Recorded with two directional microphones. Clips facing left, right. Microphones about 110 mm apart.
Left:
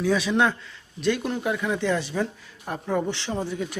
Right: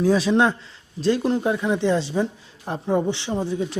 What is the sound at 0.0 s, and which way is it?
Speech, 35° right (ahead or behind).